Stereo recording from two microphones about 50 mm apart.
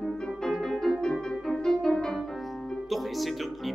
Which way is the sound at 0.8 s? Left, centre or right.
Centre.